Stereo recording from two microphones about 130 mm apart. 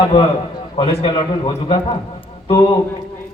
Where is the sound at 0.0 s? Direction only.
45° left (ahead or behind).